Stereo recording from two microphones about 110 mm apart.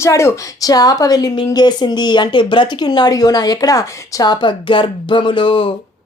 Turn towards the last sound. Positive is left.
turn(degrees=50)  # may be behind; listen again after turning